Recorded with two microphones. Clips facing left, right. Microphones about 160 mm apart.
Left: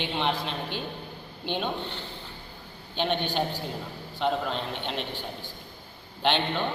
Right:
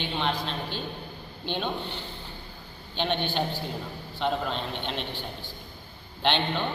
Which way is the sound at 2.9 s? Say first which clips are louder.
Left 1 dB; 10° left (ahead or behind).